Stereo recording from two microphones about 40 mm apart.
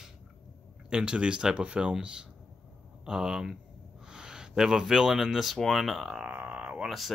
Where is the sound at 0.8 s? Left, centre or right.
Right.